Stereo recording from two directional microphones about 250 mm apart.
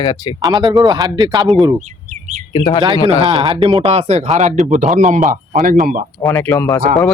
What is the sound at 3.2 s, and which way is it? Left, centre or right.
Speech, right.